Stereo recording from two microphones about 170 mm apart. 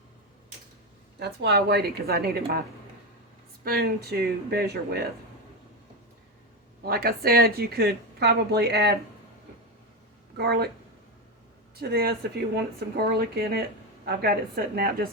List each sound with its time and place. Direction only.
1.2 s a woman's voice: 80° right
6.8 s a woman's voice: 60° right (ahead or behind)
10.3 s a woman's voice: 70° right (ahead or behind)
11.8 s a woman's voice: 65° right (ahead or behind)